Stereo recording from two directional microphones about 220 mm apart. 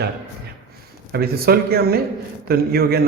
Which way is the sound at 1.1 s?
45° right (ahead or behind).